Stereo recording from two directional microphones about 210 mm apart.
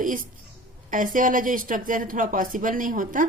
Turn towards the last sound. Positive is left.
turn(degrees=-40)  # may be behind; listen again after turning